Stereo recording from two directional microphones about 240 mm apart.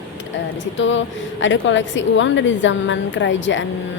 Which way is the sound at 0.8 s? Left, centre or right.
Left.